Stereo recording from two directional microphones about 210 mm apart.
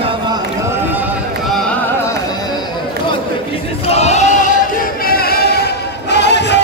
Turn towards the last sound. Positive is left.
turn(degrees=55)  # may be behind; listen again after turning